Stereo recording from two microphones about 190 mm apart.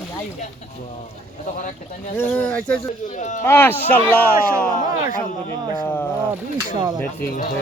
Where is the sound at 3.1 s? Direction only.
40° left (ahead or behind).